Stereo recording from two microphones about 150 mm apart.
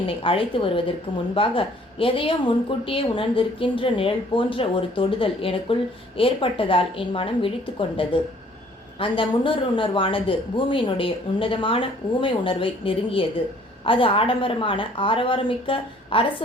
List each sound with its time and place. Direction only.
0.1 s a woman's voice: 35° left (ahead or behind)